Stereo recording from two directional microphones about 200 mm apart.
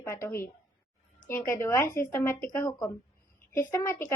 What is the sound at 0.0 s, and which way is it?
A woman's voice, 10° left (ahead or behind).